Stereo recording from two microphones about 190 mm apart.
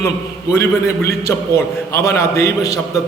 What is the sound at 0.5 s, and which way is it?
A man's voice, 15° left (ahead or behind).